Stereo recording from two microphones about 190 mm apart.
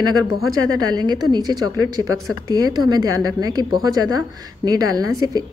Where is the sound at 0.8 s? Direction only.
20° right (ahead or behind).